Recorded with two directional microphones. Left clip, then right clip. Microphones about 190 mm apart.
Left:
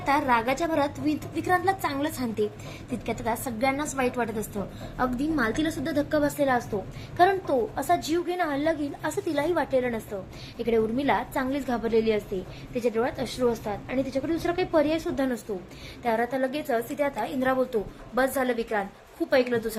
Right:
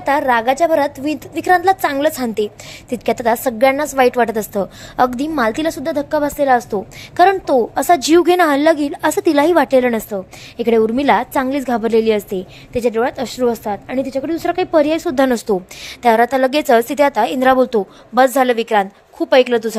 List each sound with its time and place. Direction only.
0.0 s a woman's voice: 50° right (ahead or behind)